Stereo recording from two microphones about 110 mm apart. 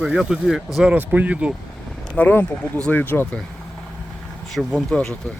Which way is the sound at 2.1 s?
15° left (ahead or behind).